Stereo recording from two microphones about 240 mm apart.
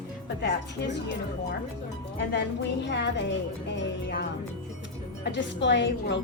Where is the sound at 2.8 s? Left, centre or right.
Left.